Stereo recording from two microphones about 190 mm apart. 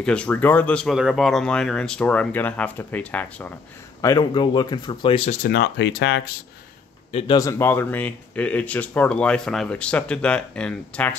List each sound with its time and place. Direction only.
0.0 s speech: 5° left (ahead or behind)
4.0 s speech: 20° left (ahead or behind)
5.4 s speech: 60° left (ahead or behind)
7.1 s speech: 30° left (ahead or behind)
7.3 s speech: 15° left (ahead or behind)